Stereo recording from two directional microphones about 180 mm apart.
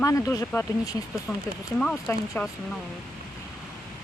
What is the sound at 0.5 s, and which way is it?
Speech, 15° left (ahead or behind).